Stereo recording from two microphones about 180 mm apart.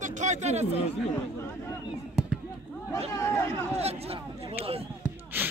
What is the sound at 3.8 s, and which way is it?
Speech, 35° right (ahead or behind).